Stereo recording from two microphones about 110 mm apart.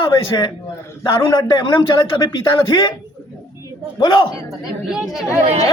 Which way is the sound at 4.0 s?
50° left (ahead or behind).